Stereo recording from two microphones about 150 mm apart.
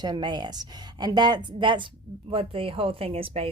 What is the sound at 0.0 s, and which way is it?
A woman's voice, 30° right (ahead or behind).